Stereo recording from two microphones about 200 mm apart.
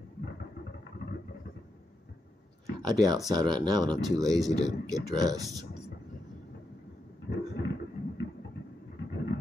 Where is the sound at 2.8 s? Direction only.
20° right (ahead or behind).